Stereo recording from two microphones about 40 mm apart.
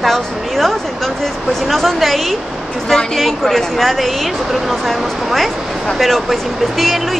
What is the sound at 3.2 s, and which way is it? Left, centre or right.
A woman's voice, centre.